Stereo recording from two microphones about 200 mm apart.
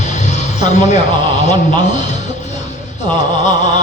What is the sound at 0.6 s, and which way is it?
Speech, 35° left (ahead or behind).